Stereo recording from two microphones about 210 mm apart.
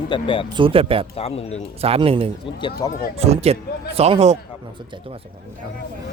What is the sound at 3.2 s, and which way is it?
Speech, 30° right (ahead or behind).